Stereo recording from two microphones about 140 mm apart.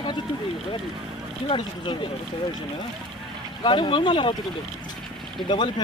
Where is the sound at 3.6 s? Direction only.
35° left (ahead or behind).